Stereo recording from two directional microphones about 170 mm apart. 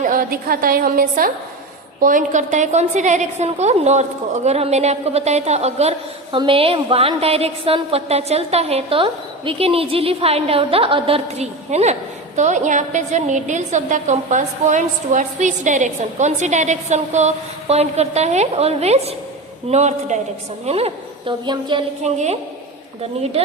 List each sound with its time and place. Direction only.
0.0 s a woman's voice: 55° right (ahead or behind); by 21.8 s 30° right (ahead or behind)
22.0 s a woman's voice: 40° right (ahead or behind)